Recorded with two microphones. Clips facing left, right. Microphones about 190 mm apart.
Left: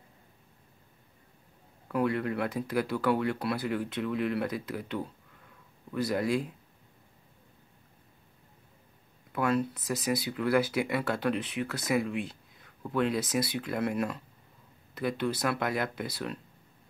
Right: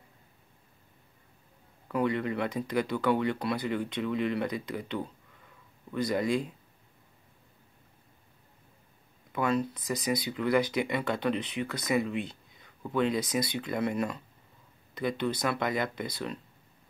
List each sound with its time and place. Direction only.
1.9 s speech: 5° left (ahead or behind)
9.3 s speech: 5° left (ahead or behind)